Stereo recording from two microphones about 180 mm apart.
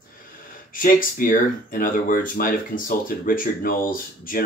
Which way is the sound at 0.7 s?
50° left (ahead or behind).